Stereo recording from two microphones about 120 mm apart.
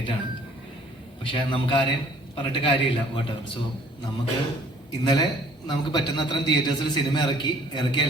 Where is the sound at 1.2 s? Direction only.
45° left (ahead or behind).